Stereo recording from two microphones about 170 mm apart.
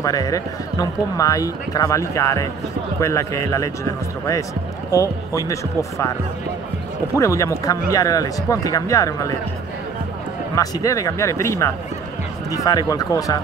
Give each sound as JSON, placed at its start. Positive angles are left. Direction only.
{"t": 0.0, "sound": "speech", "side_deg": 20}
{"t": 4.9, "sound": "speech", "side_deg": 20}
{"t": 7.2, "sound": "speech", "side_deg": 20}
{"t": 10.5, "sound": "speech", "side_deg": 20}